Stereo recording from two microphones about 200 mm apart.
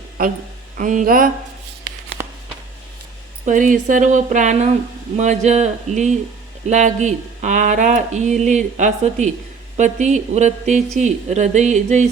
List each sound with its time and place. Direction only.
0.2 s speech: 45° right (ahead or behind)
2.2 s a sound: 10° right (ahead or behind)
3.4 s speech: 40° right (ahead or behind)